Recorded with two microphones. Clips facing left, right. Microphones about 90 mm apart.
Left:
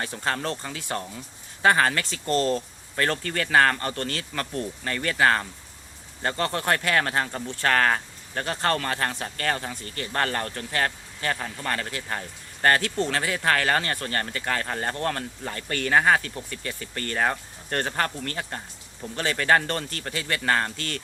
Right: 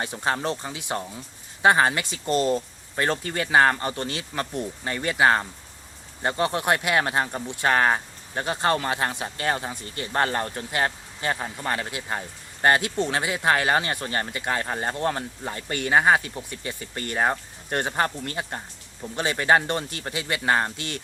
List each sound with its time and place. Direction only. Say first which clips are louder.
0.0 s speech: right 2 dB; 20° right (ahead or behind)